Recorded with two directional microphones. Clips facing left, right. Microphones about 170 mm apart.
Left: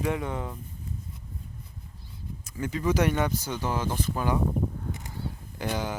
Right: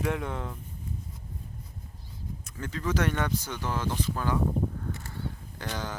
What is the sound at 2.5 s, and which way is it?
Speech, 10° left (ahead or behind).